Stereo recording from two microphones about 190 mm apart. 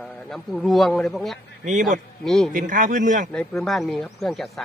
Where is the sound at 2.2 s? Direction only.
Centre (ahead or behind).